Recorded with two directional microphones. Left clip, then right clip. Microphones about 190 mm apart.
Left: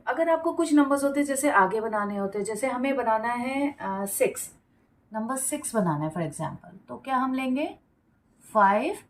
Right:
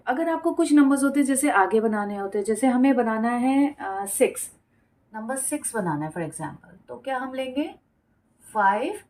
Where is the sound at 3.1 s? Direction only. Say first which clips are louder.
Right 1 dB; 45° right (ahead or behind).